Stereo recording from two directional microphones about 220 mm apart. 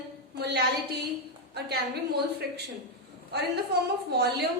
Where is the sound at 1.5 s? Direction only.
45° right (ahead or behind).